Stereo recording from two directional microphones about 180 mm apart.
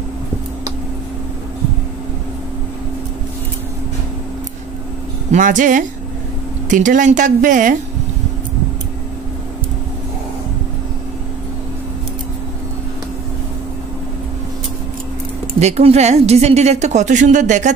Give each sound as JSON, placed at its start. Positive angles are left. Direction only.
{"t": 5.3, "sound": "speech", "side_deg": -45}
{"t": 15.6, "sound": "a woman's voice", "side_deg": -35}